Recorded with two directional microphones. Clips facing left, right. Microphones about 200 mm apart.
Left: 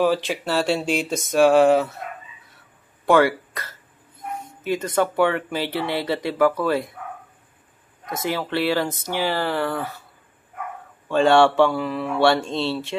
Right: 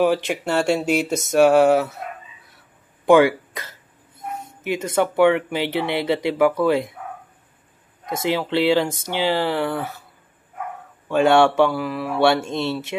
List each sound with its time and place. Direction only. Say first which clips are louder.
0.3 s speech: right 2 dB; 15° right (ahead or behind)
3.1 s speech: right 3 dB; 15° right (ahead or behind)
8.2 s speech: right 3 dB; 15° right (ahead or behind)
11.1 s speech: even; 10° right (ahead or behind)